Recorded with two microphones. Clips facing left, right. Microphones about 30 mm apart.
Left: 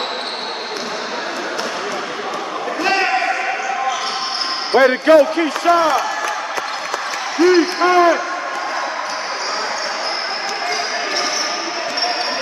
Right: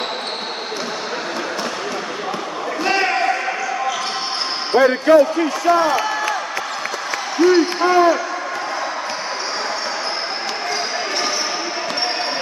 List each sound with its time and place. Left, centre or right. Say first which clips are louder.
4.7 s speech: left 1 dB; left